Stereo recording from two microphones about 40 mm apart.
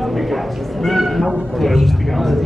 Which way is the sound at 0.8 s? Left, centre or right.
Centre.